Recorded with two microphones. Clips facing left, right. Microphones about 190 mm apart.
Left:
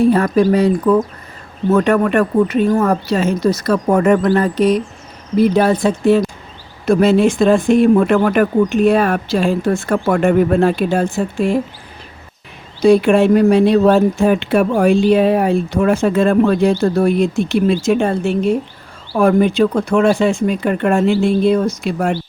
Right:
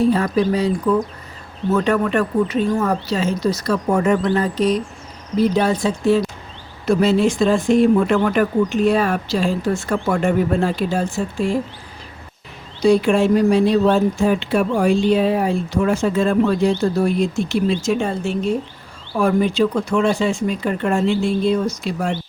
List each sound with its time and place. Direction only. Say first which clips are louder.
0.0 s speech: left 4 dB; 55° left (ahead or behind)
12.8 s speech: left 4 dB; 60° left (ahead or behind)